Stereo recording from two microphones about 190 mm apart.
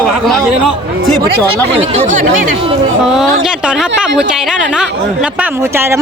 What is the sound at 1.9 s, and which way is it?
Speech, 45° right (ahead or behind).